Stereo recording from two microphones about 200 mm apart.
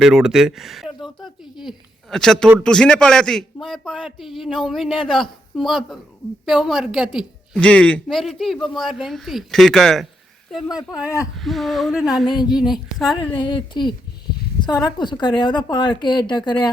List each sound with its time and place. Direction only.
0.0 s a woman's voice: 5° right (ahead or behind)
1.0 s a sound: centre (ahead or behind)
2.6 s a woman's voice: 5° left (ahead or behind)
11.3 s a woman's voice: centre (ahead or behind)
13.3 s a woman's voice: 25° left (ahead or behind)